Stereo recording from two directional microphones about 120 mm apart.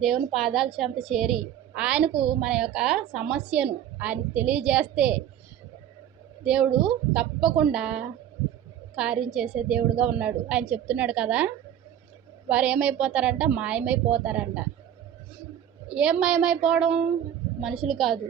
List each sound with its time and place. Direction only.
0.0 s a woman's voice: centre (ahead or behind)
2.0 s a woman's voice: 50° right (ahead or behind)
2.4 s a woman's voice: 5° right (ahead or behind)
6.4 s a woman's voice: 10° right (ahead or behind)
15.9 s a woman's voice: 10° right (ahead or behind)